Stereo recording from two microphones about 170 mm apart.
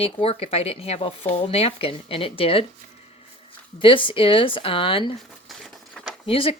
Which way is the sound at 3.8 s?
30° left (ahead or behind).